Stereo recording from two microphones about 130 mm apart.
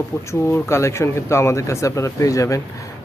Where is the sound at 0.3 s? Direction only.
20° left (ahead or behind).